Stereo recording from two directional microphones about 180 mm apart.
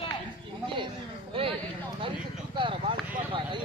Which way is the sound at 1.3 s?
30° right (ahead or behind).